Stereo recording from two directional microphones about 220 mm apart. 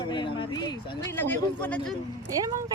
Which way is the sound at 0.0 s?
20° left (ahead or behind).